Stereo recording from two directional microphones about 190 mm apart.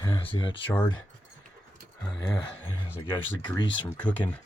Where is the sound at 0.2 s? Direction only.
25° left (ahead or behind).